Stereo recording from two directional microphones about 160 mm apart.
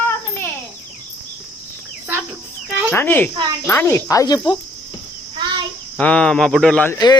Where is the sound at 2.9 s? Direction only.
15° left (ahead or behind).